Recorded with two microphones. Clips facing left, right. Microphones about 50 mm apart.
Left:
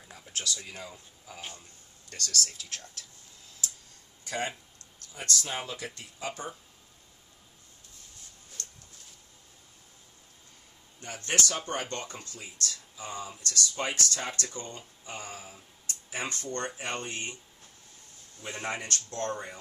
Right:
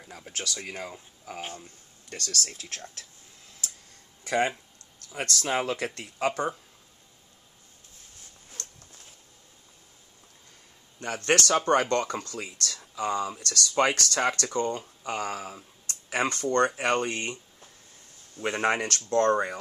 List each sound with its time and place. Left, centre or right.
0.2 s speech: right
5.2 s speech: right
11.0 s speech: right
18.4 s speech: right